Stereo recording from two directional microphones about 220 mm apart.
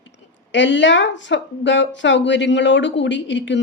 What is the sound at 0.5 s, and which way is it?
A woman's voice, 55° left (ahead or behind).